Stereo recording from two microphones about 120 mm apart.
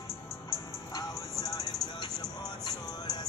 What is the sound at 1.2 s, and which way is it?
Music, 30° left (ahead or behind).